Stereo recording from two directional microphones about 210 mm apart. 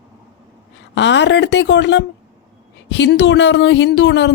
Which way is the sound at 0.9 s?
55° left (ahead or behind).